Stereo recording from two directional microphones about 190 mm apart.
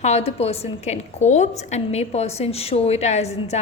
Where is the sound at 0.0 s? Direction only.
35° left (ahead or behind).